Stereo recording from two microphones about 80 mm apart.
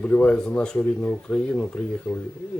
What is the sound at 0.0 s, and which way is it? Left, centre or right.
Speech, centre.